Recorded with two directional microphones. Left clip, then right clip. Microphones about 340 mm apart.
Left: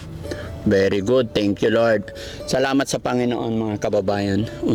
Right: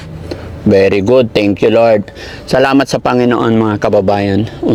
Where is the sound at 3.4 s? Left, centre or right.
Right.